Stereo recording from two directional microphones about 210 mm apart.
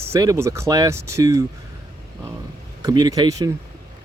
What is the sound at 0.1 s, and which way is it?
Speech, 15° right (ahead or behind).